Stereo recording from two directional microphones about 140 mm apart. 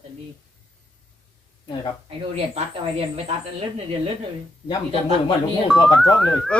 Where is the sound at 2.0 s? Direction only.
45° right (ahead or behind).